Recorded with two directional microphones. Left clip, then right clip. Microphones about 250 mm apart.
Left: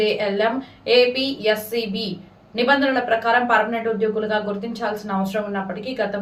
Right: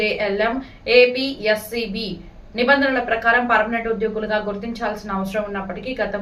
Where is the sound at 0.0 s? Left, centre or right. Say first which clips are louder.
Even; centre.